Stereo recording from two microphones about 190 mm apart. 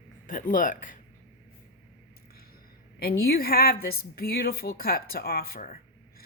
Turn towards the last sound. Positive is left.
turn(degrees=50)  # may be behind; listen again after turning